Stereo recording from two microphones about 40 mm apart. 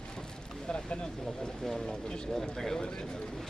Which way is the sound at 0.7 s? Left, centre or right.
Left.